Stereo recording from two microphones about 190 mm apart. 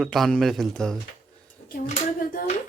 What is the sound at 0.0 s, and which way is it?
Speech, centre (ahead or behind).